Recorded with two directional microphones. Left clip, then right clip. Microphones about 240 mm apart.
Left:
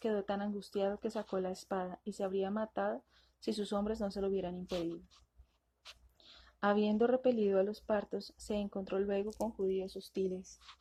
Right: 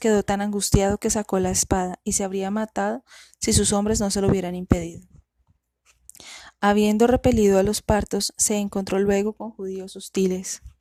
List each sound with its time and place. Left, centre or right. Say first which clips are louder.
0.0 s a woman's voice: right 15 dB; right
6.1 s a woman's voice: right 14 dB; right
9.4 s speech: right 4 dB; right